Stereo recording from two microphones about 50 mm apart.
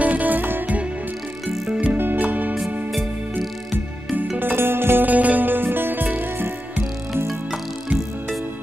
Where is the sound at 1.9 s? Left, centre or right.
Right.